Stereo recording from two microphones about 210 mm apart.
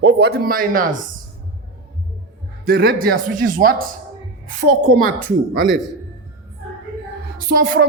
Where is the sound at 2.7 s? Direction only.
50° right (ahead or behind).